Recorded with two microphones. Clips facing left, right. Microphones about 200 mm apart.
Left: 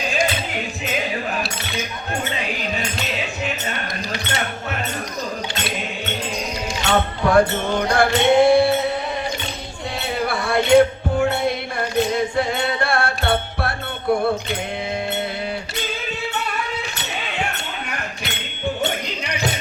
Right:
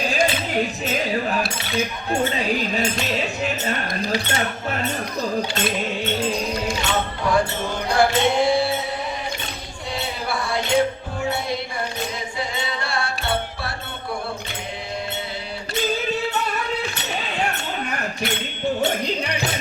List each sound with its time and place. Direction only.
6.8 s music: 55° left (ahead or behind)
10.2 s music: 60° left (ahead or behind)